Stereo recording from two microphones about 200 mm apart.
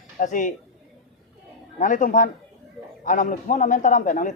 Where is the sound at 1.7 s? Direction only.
40° left (ahead or behind).